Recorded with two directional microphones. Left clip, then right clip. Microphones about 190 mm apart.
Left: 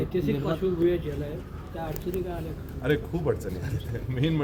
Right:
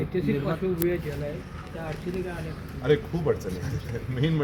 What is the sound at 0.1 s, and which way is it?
Speech, 70° left (ahead or behind).